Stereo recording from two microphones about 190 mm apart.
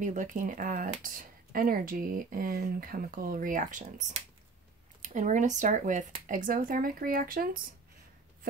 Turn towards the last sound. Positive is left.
turn(degrees=-50)  # may be behind; listen again after turning